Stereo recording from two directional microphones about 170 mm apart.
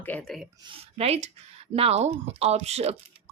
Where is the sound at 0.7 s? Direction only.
35° right (ahead or behind).